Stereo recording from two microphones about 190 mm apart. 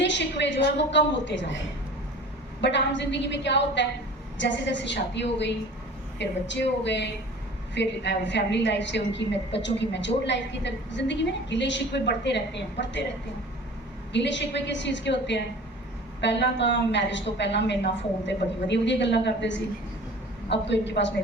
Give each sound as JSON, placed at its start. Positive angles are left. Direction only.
{"t": 0.0, "sound": "a woman's voice", "side_deg": 70}
{"t": 2.6, "sound": "a woman's voice", "side_deg": 65}
{"t": 14.1, "sound": "a woman's voice", "side_deg": 70}